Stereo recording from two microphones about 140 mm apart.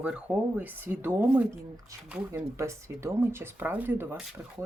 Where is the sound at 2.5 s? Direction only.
20° right (ahead or behind).